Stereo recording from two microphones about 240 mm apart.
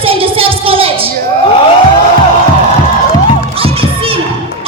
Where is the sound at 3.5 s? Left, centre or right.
Right.